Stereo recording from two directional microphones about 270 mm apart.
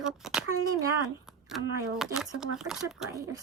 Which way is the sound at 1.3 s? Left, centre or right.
Centre.